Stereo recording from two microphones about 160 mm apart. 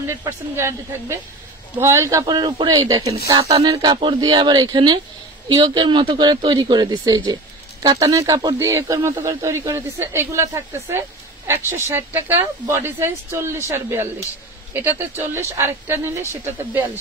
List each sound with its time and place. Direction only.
0.2 s speech: 20° right (ahead or behind)
3.4 s speech: 40° right (ahead or behind)
3.7 s speech: 25° right (ahead or behind)